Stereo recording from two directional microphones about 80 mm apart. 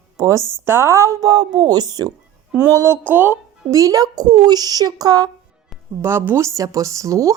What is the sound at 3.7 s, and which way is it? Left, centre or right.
A woman's voice, right.